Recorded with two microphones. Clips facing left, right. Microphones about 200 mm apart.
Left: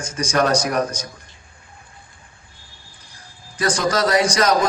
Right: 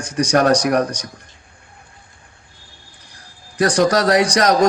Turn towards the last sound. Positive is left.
turn(degrees=-65)  # may be behind; listen again after turning